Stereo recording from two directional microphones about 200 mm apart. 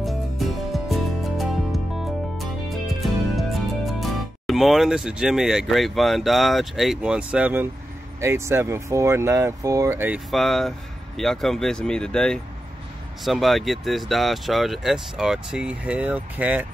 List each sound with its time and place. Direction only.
0.0 s music: centre (ahead or behind)
3.0 s speech: centre (ahead or behind)